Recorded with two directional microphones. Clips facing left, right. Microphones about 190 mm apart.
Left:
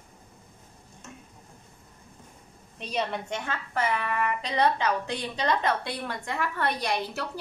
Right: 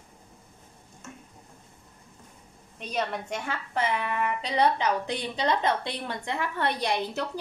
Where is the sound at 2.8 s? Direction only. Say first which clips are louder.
Even; centre (ahead or behind).